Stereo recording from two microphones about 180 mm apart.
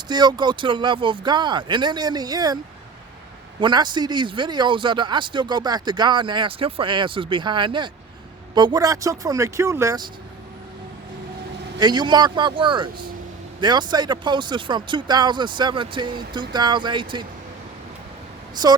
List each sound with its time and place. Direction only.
0.1 s a man's voice: 25° right (ahead or behind)
3.6 s a man's voice: 25° right (ahead or behind)
11.8 s a man's voice: 25° right (ahead or behind)